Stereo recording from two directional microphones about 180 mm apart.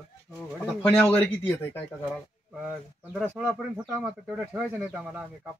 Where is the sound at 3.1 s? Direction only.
Centre (ahead or behind).